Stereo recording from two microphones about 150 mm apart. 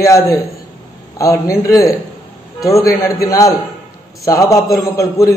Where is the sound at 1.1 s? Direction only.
20° left (ahead or behind).